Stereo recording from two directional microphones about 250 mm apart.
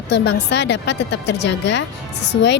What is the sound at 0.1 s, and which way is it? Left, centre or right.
Speech, left.